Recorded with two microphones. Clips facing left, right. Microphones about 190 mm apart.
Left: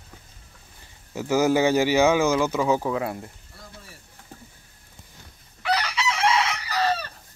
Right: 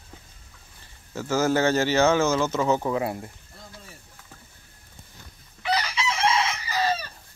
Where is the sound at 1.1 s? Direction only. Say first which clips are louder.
Left 2 dB; 15° left (ahead or behind).